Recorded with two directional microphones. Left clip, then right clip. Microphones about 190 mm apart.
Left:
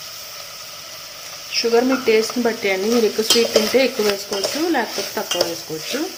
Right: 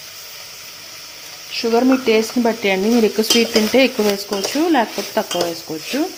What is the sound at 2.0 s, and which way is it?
Speech, 25° right (ahead or behind).